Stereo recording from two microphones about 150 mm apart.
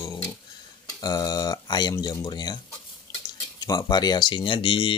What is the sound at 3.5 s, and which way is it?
Speech, 25° left (ahead or behind).